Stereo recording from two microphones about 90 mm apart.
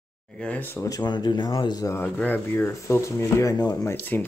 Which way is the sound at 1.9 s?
25° left (ahead or behind).